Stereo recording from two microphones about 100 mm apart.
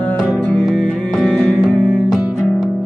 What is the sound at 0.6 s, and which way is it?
Music, 10° left (ahead or behind).